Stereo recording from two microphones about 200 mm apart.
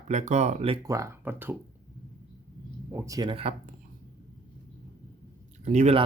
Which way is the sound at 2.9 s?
15° right (ahead or behind).